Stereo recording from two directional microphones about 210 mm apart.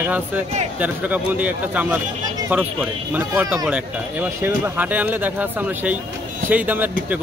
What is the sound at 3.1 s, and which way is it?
Speech, 5° right (ahead or behind).